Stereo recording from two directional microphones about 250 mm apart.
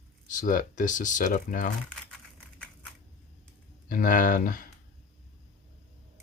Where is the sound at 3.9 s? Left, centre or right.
Left.